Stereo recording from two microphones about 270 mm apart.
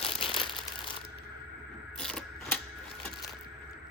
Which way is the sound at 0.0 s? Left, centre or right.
Centre.